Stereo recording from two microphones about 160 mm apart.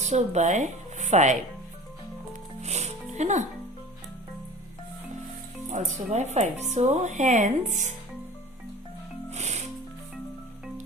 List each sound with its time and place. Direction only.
0.0 s speech: 45° right (ahead or behind)
2.6 s music: 45° right (ahead or behind)
5.6 s speech: 45° right (ahead or behind)
9.3 s music: 45° right (ahead or behind)